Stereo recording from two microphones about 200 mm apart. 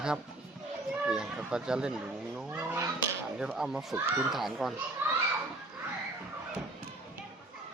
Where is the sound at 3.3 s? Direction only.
5° right (ahead or behind).